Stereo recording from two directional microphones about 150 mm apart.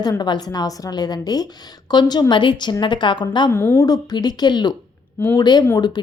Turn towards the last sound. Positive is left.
turn(degrees=30)  # may be behind; listen again after turning